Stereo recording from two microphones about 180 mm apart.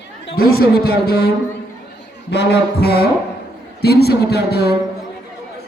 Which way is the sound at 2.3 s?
65° left (ahead or behind).